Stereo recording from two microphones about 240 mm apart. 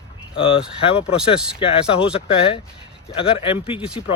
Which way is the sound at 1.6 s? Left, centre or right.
Left.